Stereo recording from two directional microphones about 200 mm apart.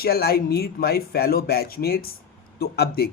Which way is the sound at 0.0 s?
50° left (ahead or behind).